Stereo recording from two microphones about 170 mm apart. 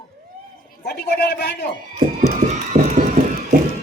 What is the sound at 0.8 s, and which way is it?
Speech, 70° left (ahead or behind).